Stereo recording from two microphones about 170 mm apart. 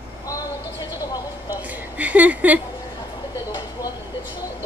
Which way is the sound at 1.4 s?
10° right (ahead or behind).